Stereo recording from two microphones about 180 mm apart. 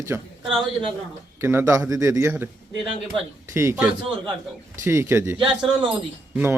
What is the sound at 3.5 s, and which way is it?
Speech, 15° right (ahead or behind).